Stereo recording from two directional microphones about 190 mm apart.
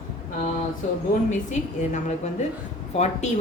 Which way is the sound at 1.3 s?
40° left (ahead or behind).